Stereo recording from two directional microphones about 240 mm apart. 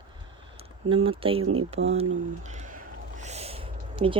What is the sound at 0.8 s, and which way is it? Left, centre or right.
Speech, right.